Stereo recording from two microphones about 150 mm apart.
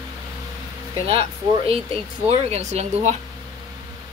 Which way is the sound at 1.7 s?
45° right (ahead or behind).